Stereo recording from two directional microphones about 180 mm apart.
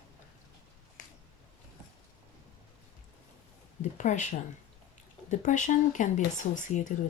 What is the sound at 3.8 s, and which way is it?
Speech, 40° left (ahead or behind).